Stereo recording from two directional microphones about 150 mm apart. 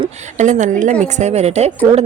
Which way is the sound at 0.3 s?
55° right (ahead or behind).